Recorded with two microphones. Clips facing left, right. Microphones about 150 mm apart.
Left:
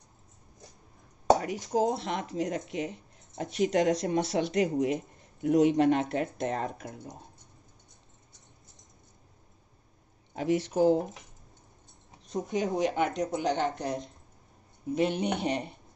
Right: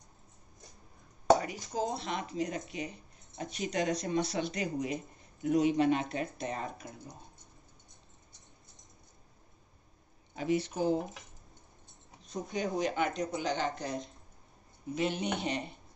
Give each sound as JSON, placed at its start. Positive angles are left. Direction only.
{"t": 1.4, "sound": "speech", "side_deg": 75}
{"t": 10.3, "sound": "speech", "side_deg": 70}
{"t": 12.3, "sound": "speech", "side_deg": 80}